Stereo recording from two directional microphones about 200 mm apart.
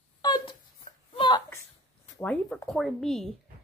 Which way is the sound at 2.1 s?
5° left (ahead or behind).